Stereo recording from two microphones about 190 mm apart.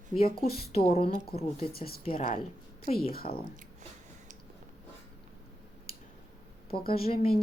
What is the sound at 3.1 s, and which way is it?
Speech, 50° left (ahead or behind).